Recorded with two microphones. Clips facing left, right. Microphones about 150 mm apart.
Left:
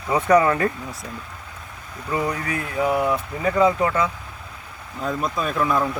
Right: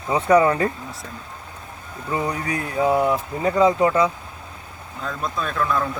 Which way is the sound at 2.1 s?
25° right (ahead or behind).